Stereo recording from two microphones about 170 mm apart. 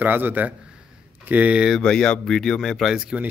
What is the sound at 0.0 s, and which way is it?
Speech, 10° right (ahead or behind).